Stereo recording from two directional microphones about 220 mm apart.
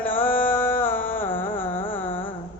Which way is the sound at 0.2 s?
10° left (ahead or behind).